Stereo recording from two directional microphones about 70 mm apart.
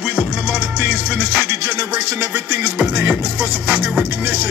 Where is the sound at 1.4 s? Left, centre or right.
Right.